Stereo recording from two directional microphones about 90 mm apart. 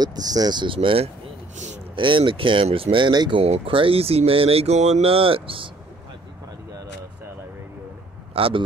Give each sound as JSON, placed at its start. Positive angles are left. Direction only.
{"t": 0.0, "sound": "speech", "side_deg": -45}
{"t": 3.1, "sound": "speech", "side_deg": -50}
{"t": 3.3, "sound": "speech", "side_deg": -80}
{"t": 8.4, "sound": "speech", "side_deg": -90}